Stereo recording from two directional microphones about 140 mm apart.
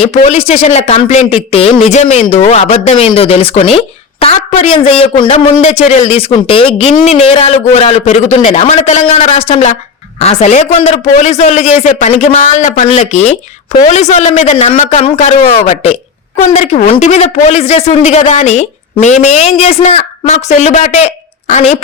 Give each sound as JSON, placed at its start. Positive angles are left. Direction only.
{"t": 0.3, "sound": "speech", "side_deg": 45}
{"t": 1.4, "sound": "speech", "side_deg": 45}
{"t": 12.8, "sound": "a woman's voice", "side_deg": 50}